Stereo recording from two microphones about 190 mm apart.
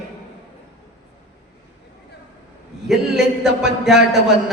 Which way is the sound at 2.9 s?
Centre (ahead or behind).